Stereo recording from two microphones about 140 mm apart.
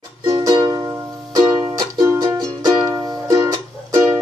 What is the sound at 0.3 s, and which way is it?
Music, 30° right (ahead or behind).